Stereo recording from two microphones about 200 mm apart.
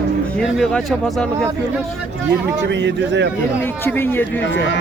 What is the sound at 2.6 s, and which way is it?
Speech, 60° right (ahead or behind).